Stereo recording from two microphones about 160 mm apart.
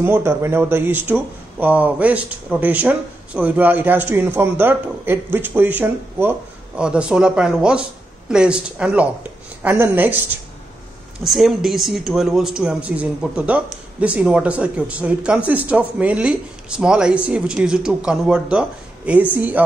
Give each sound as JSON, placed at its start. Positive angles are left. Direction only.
{"t": 0.0, "sound": "speech", "side_deg": -15}
{"t": 11.2, "sound": "speech", "side_deg": 0}